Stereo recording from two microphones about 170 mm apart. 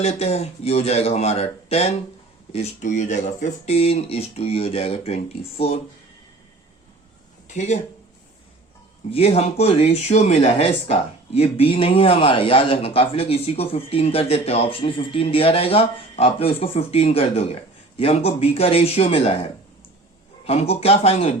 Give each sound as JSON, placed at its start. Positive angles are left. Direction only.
{"t": 0.0, "sound": "speech", "side_deg": 40}
{"t": 7.4, "sound": "a sound", "side_deg": 45}
{"t": 9.0, "sound": "speech", "side_deg": 35}